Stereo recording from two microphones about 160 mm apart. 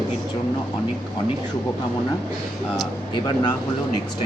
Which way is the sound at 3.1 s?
30° left (ahead or behind).